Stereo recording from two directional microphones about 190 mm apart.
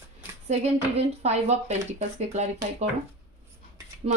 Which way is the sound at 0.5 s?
35° right (ahead or behind).